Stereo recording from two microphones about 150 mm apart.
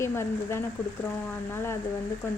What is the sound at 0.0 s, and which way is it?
Speech, 15° left (ahead or behind).